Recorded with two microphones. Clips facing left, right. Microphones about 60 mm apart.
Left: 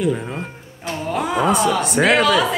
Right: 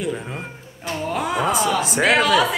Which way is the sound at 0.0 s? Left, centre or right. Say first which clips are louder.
Left 5 dB; centre.